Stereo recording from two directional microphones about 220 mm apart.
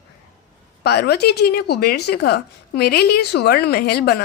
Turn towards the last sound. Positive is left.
turn(degrees=45)  # may be behind; listen again after turning